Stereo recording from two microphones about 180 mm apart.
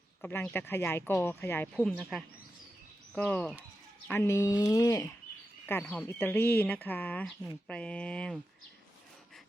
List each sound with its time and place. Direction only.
0.2 s speech: 10° left (ahead or behind)
5.8 s speech: 10° left (ahead or behind)